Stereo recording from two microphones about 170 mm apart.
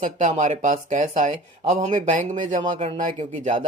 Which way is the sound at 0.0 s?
45° right (ahead or behind).